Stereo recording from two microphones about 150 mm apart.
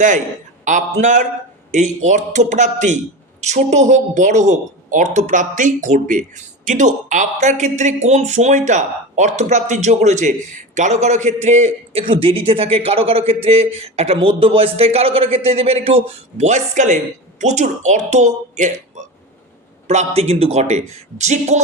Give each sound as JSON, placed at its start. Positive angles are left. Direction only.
{"t": 0.6, "sound": "a woman's voice", "side_deg": -55}
{"t": 12.0, "sound": "a man's voice", "side_deg": -35}
{"t": 19.9, "sound": "a woman's voice", "side_deg": -45}